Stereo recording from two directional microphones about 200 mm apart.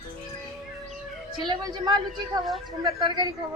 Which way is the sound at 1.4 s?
20° right (ahead or behind).